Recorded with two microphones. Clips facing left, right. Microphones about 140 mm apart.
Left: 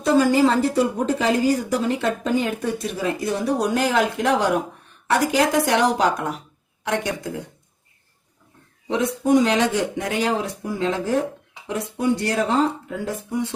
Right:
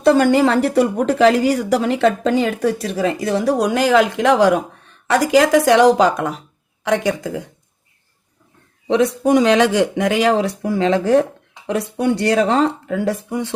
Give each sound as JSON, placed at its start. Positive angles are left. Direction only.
{"t": 0.0, "sound": "a woman's voice", "side_deg": -70}
{"t": 8.9, "sound": "speech", "side_deg": -75}